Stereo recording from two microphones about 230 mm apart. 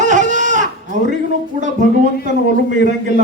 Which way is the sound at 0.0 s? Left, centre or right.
Right.